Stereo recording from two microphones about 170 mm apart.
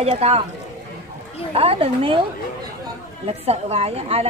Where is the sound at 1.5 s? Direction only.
35° right (ahead or behind).